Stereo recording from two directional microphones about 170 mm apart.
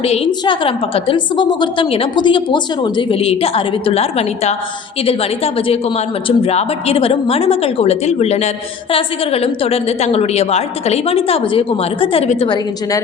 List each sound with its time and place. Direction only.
0.0 s a woman's voice: 30° left (ahead or behind)